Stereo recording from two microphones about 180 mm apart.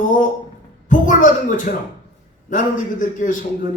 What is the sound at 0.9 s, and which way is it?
A woman's voice, 45° left (ahead or behind).